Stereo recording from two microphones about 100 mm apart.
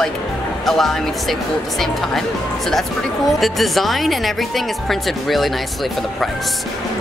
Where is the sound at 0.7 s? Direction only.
Centre (ahead or behind).